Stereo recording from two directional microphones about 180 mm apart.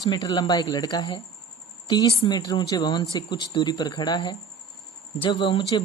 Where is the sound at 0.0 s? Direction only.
20° left (ahead or behind).